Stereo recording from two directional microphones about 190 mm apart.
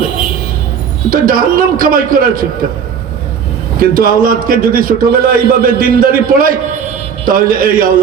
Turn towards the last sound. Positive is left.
turn(degrees=-50)  # may be behind; listen again after turning